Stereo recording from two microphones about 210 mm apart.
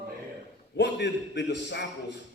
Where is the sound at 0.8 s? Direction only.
55° left (ahead or behind).